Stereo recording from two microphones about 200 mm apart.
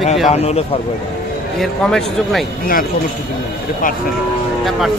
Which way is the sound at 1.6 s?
Centre (ahead or behind).